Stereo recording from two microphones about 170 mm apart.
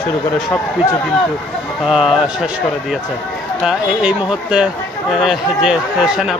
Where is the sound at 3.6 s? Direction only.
5° right (ahead or behind).